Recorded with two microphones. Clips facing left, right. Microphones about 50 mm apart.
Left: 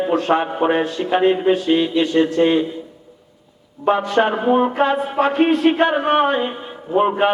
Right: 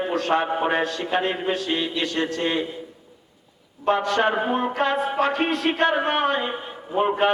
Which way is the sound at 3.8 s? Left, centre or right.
Centre.